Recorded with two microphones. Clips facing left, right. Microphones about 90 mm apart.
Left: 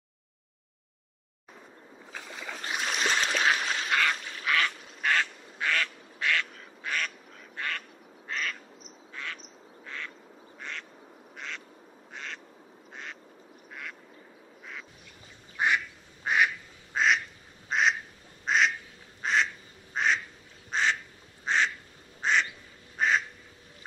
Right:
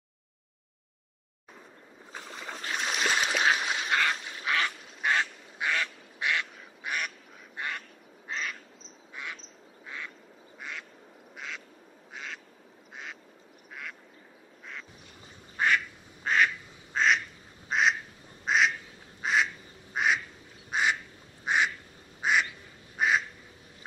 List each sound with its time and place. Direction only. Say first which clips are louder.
2.1 s boat: even; 90° left
2.7 s a sound: even; centre (ahead or behind)
3.5 s duck: even; 10° right (ahead or behind)
3.9 s duck: left 1 dB; 25° right (ahead or behind)
7.5 s quack: left 1 dB; 20° right (ahead or behind)
8.3 s duck: left 1 dB; 20° right (ahead or behind)
9.1 s quack: left 1 dB; 15° right (ahead or behind)
11.3 s duck: even; 5° right (ahead or behind)
15.5 s quack: right 1 dB; 15° left (ahead or behind)
17.6 s duck: even; centre (ahead or behind)
19.2 s quack: even; 5° right (ahead or behind)
20.7 s duck: even; 10° right (ahead or behind)